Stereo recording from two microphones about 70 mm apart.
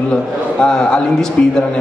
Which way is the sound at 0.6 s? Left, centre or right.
Centre.